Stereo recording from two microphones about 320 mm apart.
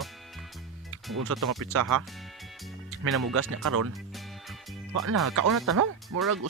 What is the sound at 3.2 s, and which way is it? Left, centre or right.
Speech, right.